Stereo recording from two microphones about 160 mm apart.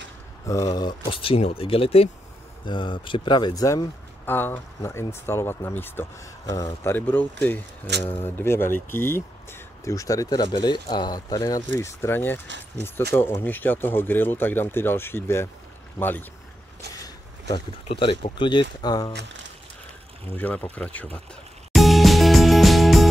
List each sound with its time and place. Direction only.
0.5 s speech: 25° left (ahead or behind)
16.9 s a sound: 20° left (ahead or behind)
17.8 s speech: 35° left (ahead or behind)
20.3 s speech: 10° left (ahead or behind)
21.7 s music: centre (ahead or behind)